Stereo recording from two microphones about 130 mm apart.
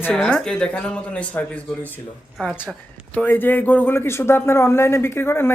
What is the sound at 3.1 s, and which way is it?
Speech, 15° left (ahead or behind).